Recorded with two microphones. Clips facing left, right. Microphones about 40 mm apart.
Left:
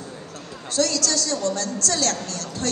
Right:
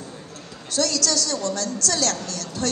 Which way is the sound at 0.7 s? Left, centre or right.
Left.